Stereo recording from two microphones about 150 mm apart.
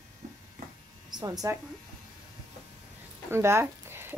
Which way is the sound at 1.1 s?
25° right (ahead or behind).